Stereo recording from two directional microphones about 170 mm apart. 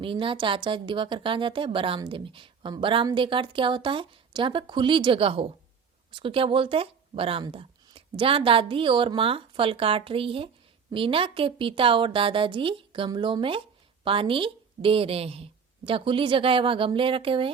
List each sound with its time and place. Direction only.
0.0 s a woman's voice: 30° right (ahead or behind)